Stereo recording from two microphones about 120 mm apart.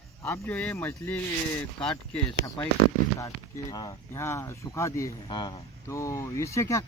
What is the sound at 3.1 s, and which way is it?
Speech, 25° left (ahead or behind).